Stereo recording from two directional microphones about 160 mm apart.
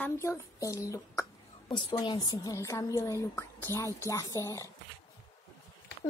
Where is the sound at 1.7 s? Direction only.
30° left (ahead or behind).